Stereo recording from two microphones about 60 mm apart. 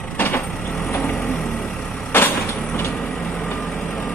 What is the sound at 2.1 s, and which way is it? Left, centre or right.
Vehicle, left.